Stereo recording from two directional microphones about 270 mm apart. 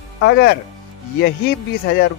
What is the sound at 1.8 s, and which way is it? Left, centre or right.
Speech, left.